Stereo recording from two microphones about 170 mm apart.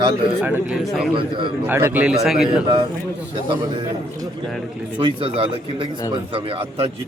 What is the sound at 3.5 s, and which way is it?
A man's voice, 30° right (ahead or behind).